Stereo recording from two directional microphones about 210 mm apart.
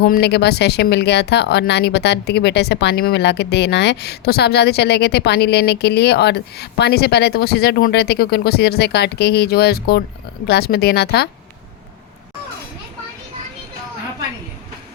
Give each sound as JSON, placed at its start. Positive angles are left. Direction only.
{"t": 0.0, "sound": "speech", "side_deg": 50}